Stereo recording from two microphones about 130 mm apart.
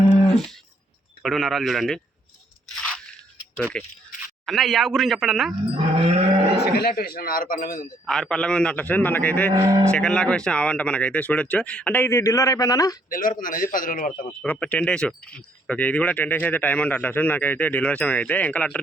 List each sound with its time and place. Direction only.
1.2 s speech: centre (ahead or behind)
3.8 s speech: 5° left (ahead or behind)
5.7 s a sound: 40° right (ahead or behind)
6.9 s speech: 90° left
8.0 s speech: 5° left (ahead or behind)
9.5 s speech: 25° right (ahead or behind)
9.9 s speech: 5° left (ahead or behind); by 13.0 s 25° left (ahead or behind)
13.1 s speech: 90° left
14.4 s speech: 10° left (ahead or behind)